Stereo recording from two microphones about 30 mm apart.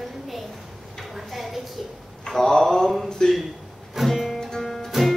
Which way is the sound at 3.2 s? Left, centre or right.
Left.